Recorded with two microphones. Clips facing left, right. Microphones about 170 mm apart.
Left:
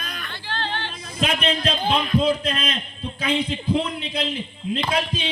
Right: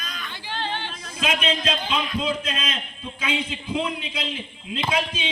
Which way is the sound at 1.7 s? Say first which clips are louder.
Left 4 dB; 40° left (ahead or behind).